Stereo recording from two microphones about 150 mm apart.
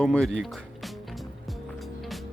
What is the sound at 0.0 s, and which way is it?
Speech, 5° left (ahead or behind).